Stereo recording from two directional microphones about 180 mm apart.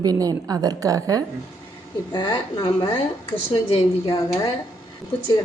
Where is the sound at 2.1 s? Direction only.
25° left (ahead or behind).